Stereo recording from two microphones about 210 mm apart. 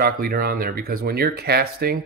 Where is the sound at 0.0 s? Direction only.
45° right (ahead or behind).